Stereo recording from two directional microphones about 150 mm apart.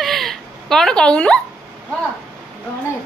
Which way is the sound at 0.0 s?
Centre (ahead or behind).